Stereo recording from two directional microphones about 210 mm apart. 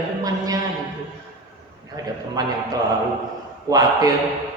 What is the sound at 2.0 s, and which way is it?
Speech, 15° right (ahead or behind).